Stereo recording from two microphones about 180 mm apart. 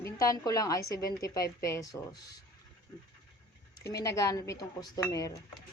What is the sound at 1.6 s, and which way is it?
Speech, 20° left (ahead or behind).